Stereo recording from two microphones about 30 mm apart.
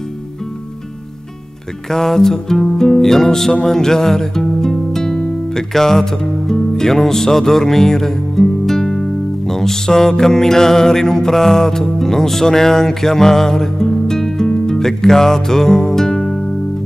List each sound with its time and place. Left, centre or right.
1.9 s music: centre